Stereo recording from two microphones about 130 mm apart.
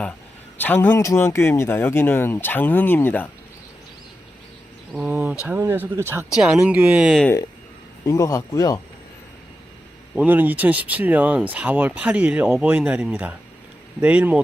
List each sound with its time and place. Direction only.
0.6 s speech: 15° left (ahead or behind)
5.0 s speech: 15° right (ahead or behind)
6.3 s speech: 5° right (ahead or behind)
8.0 s speech: 25° left (ahead or behind)
10.2 s speech: 15° right (ahead or behind)